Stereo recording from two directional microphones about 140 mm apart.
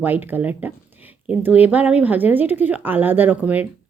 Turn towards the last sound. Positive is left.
turn(degrees=-10)  # may be behind; listen again after turning